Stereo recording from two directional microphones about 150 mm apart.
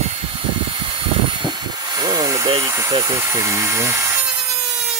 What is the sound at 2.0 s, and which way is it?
Helicopter, 25° right (ahead or behind).